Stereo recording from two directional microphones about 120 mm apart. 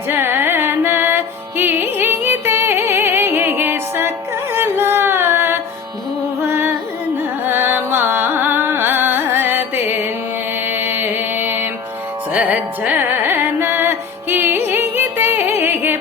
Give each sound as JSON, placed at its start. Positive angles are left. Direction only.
{"t": 0.1, "sound": "music", "side_deg": -20}
{"t": 7.4, "sound": "carnatic music", "side_deg": -15}
{"t": 10.7, "sound": "mantra", "side_deg": -15}
{"t": 12.3, "sound": "carnatic music", "side_deg": -10}